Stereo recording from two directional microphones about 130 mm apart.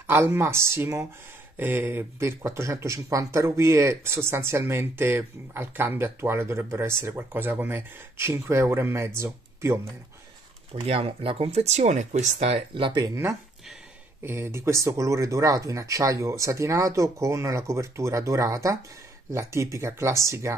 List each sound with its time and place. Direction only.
0.0 s speech: 15° right (ahead or behind)
10.7 s speech: 50° right (ahead or behind)
13.1 s speech: 20° right (ahead or behind)